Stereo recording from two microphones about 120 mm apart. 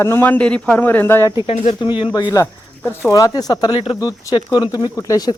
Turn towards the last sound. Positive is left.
turn(degrees=30)  # may be behind; listen again after turning